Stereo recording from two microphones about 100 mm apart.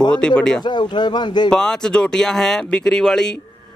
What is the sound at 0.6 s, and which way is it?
Speech, 45° left (ahead or behind).